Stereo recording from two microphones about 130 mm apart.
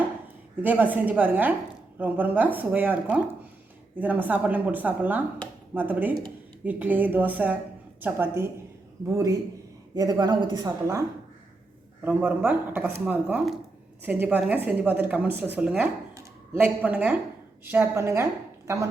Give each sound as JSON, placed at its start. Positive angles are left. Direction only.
{"t": 0.6, "sound": "a woman's voice", "side_deg": -10}
{"t": 9.9, "sound": "speech", "side_deg": -30}
{"t": 12.0, "sound": "a woman's voice", "side_deg": -15}